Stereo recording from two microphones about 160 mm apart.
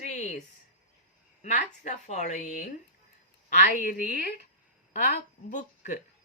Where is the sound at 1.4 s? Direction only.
50° left (ahead or behind).